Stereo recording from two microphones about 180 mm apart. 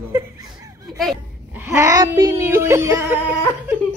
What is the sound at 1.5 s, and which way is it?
Speech, 15° right (ahead or behind).